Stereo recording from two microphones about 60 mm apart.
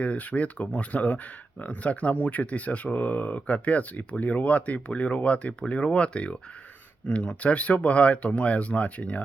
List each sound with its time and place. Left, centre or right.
0.0 s speech: left